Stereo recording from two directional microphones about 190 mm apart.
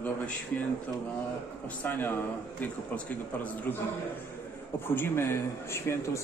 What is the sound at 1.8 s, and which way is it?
A man's voice, 10° left (ahead or behind).